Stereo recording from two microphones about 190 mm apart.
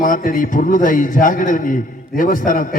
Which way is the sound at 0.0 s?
45° left (ahead or behind).